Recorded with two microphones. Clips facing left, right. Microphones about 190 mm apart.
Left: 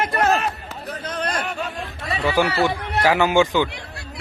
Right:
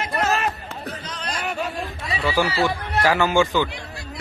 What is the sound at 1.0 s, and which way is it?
Chatter, 55° left (ahead or behind).